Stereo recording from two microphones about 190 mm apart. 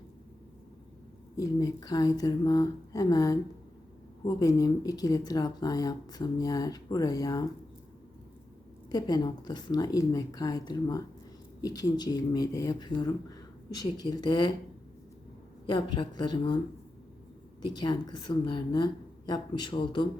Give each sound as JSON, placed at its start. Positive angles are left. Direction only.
{"t": 1.4, "sound": "speech", "side_deg": 20}
{"t": 4.4, "sound": "speech", "side_deg": 20}
{"t": 8.9, "sound": "speech", "side_deg": 20}
{"t": 16.0, "sound": "speech", "side_deg": 25}
{"t": 17.7, "sound": "speech", "side_deg": 20}